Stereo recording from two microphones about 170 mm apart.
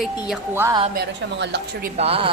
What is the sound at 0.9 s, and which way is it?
Speech, 85° right.